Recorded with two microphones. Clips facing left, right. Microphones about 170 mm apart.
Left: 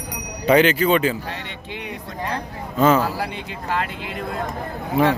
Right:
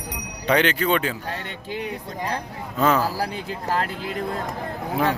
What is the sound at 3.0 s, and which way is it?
Speech, 40° right (ahead or behind).